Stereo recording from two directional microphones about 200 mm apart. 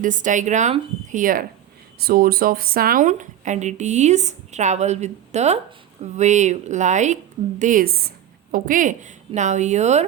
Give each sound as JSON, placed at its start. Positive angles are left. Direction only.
{"t": 0.0, "sound": "a woman's voice", "side_deg": -40}